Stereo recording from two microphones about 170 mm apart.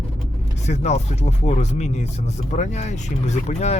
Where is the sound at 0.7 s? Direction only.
40° left (ahead or behind).